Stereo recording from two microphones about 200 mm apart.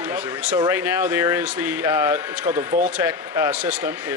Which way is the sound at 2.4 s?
35° right (ahead or behind).